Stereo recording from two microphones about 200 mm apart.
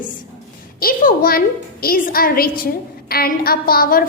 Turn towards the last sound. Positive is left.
turn(degrees=45)  # may be behind; listen again after turning